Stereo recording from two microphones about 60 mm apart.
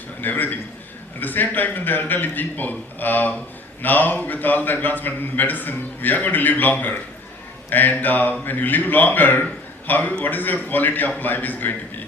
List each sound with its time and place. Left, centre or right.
0.2 s speech: left